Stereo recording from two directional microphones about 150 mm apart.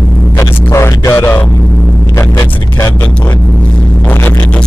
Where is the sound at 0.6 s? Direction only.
20° left (ahead or behind).